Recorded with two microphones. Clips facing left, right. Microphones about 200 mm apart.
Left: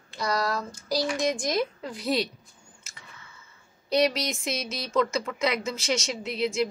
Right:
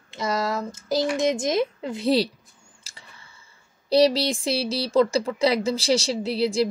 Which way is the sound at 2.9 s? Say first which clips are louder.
Right 3 dB; 35° right (ahead or behind).